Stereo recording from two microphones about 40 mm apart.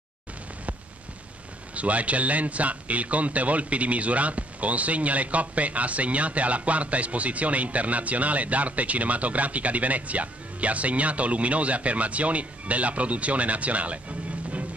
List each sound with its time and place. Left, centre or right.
1.8 s a man's voice: right